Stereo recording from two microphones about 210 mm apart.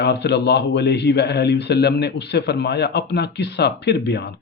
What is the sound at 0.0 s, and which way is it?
A man's voice, 55° left (ahead or behind).